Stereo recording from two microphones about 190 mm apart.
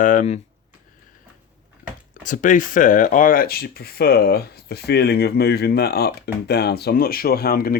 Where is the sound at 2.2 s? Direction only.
45° left (ahead or behind).